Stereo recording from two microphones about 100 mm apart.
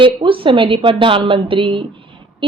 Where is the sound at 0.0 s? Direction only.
55° right (ahead or behind).